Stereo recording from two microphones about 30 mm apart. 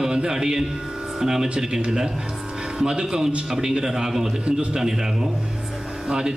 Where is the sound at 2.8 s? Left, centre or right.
Right.